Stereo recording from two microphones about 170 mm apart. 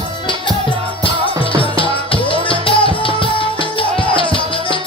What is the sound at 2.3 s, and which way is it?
Music, 30° left (ahead or behind).